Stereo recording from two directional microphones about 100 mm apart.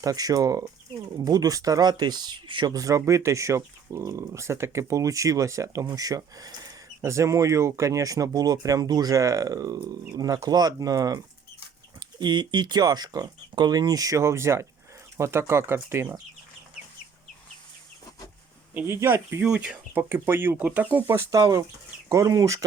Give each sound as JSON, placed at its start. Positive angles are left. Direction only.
{"t": 0.0, "sound": "speech", "side_deg": -40}
{"t": 2.7, "sound": "speech", "side_deg": -35}
{"t": 18.7, "sound": "speech", "side_deg": -15}
{"t": 18.9, "sound": "speech", "side_deg": -30}
{"t": 19.5, "sound": "speech", "side_deg": -10}